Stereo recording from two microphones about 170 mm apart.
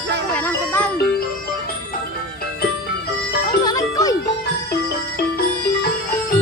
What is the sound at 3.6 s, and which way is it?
Music, 20° left (ahead or behind).